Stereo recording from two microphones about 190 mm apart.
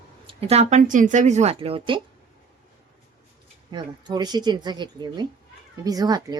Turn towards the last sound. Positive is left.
turn(degrees=-20)  # may be behind; listen again after turning